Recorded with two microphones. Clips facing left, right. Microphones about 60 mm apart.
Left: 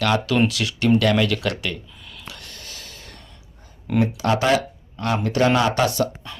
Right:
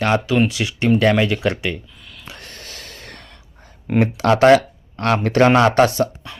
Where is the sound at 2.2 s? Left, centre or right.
Right.